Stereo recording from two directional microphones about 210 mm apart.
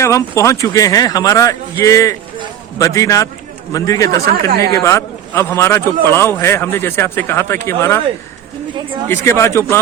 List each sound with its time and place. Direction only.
0.0 s a man's voice: 15° left (ahead or behind)
9.2 s a man's voice: 15° left (ahead or behind)